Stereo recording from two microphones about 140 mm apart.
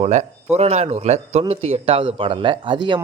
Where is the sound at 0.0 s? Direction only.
55° right (ahead or behind).